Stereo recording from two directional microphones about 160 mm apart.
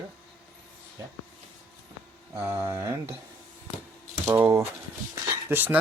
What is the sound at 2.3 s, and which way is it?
Speech, 15° right (ahead or behind).